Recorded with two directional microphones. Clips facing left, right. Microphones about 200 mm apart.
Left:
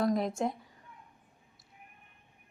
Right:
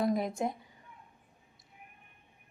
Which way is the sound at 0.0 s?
Centre (ahead or behind).